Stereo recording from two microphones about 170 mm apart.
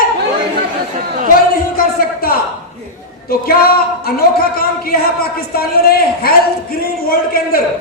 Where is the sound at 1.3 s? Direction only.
60° left (ahead or behind).